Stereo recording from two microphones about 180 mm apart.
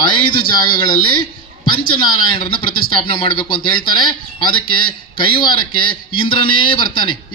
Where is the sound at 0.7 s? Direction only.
30° left (ahead or behind).